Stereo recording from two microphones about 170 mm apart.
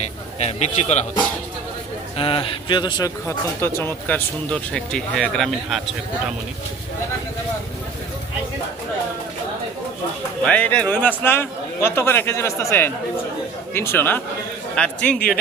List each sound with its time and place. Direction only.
0.0 s a man's voice: 40° left (ahead or behind)
2.1 s speech: 30° left (ahead or behind); by 5.8 s centre (ahead or behind)
10.4 s a man's voice: 5° left (ahead or behind)